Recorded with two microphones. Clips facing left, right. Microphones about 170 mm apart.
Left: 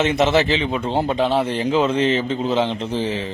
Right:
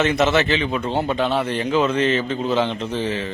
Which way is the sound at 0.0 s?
25° left (ahead or behind).